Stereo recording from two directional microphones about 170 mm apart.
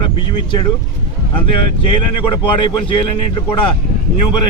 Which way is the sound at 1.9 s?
30° left (ahead or behind).